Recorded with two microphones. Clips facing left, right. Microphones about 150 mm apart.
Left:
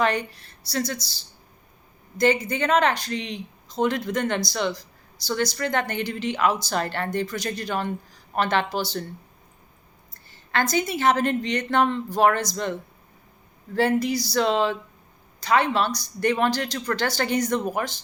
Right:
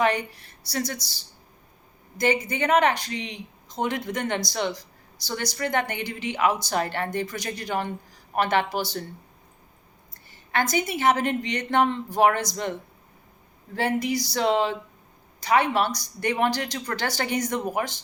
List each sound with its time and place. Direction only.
0.0 s speech: 15° right (ahead or behind)
2.1 s speech: 15° right (ahead or behind)
10.5 s speech: 15° right (ahead or behind)
13.7 s speech: 15° right (ahead or behind)